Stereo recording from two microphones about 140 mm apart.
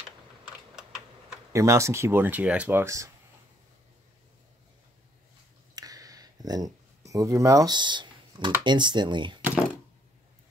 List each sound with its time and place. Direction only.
1.5 s speech: 20° right (ahead or behind)
5.8 s a sound: 25° right (ahead or behind)
8.6 s speech: 35° right (ahead or behind)